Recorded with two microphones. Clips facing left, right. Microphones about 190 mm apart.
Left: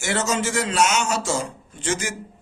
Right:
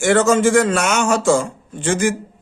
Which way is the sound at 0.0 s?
55° right (ahead or behind).